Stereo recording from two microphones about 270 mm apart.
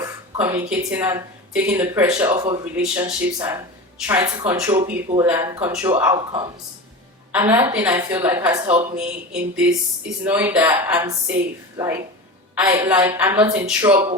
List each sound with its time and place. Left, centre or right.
0.3 s a woman's voice: centre
2.3 s speech: right
2.7 s a woman's voice: centre
7.3 s a woman's voice: centre